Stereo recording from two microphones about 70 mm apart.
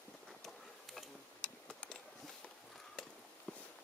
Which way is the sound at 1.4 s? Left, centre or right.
Centre.